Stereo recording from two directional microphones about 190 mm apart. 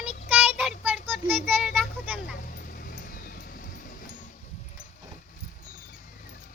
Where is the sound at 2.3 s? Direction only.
50° left (ahead or behind).